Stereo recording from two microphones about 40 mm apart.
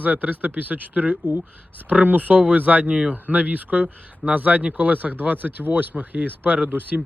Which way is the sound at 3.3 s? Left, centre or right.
Right.